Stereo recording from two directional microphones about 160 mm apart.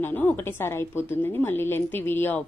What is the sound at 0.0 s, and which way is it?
A woman's voice, 10° left (ahead or behind).